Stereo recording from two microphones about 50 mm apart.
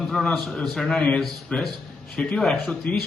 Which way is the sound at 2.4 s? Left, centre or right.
Centre.